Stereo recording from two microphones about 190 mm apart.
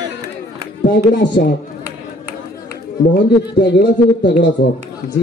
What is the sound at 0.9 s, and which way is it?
Speech, 60° left (ahead or behind).